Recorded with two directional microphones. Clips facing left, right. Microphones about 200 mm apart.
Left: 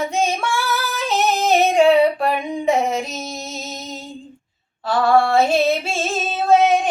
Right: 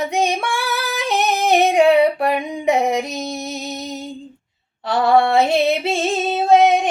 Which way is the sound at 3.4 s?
15° right (ahead or behind).